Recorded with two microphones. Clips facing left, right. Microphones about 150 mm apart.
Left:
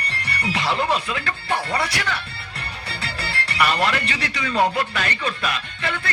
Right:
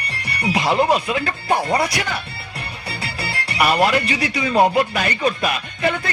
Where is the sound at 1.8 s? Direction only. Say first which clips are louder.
Right 3 dB; 15° right (ahead or behind).